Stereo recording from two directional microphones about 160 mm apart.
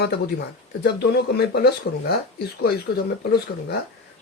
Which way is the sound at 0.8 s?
90° left.